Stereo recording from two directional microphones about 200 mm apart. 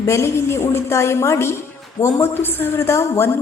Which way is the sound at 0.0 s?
15° left (ahead or behind).